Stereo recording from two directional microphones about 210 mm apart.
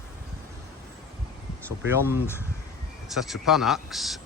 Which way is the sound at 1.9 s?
10° right (ahead or behind).